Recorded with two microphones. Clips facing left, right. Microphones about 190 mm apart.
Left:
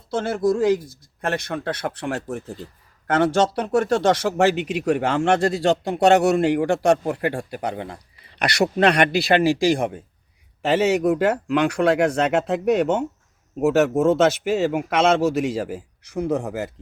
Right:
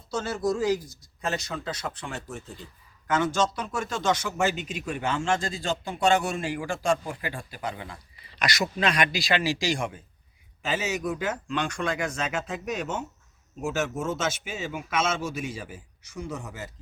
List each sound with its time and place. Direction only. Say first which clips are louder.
0.1 s speech: left 6 dB; 55° left (ahead or behind)